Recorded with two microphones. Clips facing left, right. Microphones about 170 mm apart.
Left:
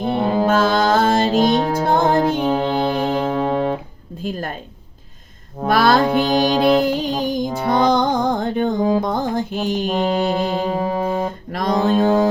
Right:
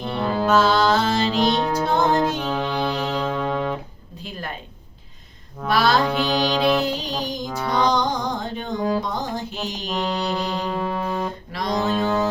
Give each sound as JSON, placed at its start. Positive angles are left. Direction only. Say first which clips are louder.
{"t": 0.2, "sound": "music", "louder": "left 3 dB", "side_deg": 20}
{"t": 0.4, "sound": "music", "louder": "right 1 dB", "side_deg": 50}
{"t": 3.5, "sound": "music", "louder": "left 5 dB", "side_deg": 40}
{"t": 4.2, "sound": "speech", "louder": "left 8 dB", "side_deg": 45}
{"t": 5.5, "sound": "music", "louder": "left 4 dB", "side_deg": 50}
{"t": 10.5, "sound": "music", "louder": "left 5 dB", "side_deg": 25}
{"t": 11.5, "sound": "music", "louder": "left 6 dB", "side_deg": 50}